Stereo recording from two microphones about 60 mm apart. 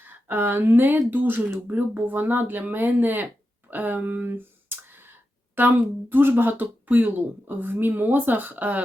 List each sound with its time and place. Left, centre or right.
0.0 s speech: right
4.3 s a sound: right
5.5 s speech: right